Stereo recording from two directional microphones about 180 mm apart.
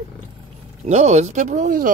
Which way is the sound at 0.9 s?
40° right (ahead or behind).